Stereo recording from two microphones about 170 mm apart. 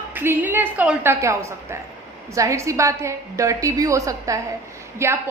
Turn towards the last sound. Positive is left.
turn(degrees=-15)  # may be behind; listen again after turning